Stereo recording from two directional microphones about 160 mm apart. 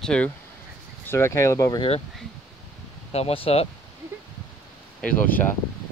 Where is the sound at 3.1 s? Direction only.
35° left (ahead or behind).